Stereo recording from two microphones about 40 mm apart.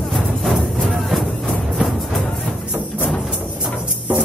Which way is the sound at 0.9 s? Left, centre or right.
Centre.